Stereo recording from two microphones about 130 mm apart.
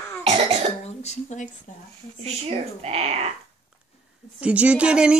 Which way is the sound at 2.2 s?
50° right (ahead or behind).